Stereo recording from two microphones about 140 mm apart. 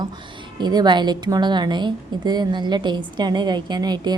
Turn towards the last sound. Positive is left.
turn(degrees=-30)  # may be behind; listen again after turning